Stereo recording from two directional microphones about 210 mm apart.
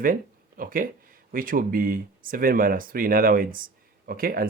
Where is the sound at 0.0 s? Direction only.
40° right (ahead or behind).